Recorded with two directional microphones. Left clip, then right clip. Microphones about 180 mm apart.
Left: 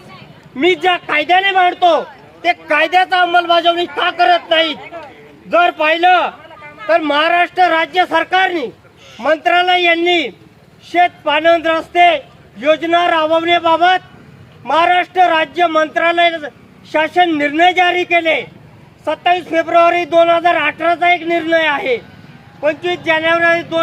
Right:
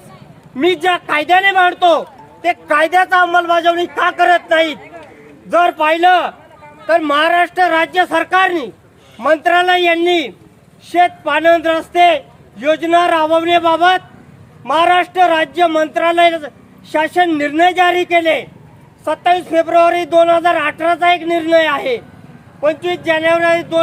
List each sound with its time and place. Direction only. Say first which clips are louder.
0.5 s a man's voice: left 1 dB; 25° right (ahead or behind)